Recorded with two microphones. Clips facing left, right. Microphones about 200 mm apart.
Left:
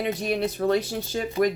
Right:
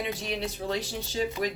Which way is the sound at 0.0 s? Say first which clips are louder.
Left 6 dB; 50° left (ahead or behind).